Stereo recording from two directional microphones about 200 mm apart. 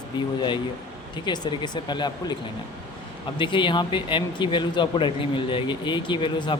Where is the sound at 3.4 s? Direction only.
25° left (ahead or behind).